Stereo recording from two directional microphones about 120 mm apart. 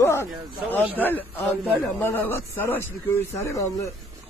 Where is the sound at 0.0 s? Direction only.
20° left (ahead or behind).